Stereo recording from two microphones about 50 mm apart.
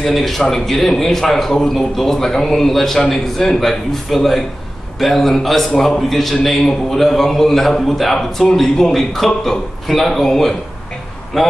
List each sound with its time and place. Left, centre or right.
0.0 s a man's voice: centre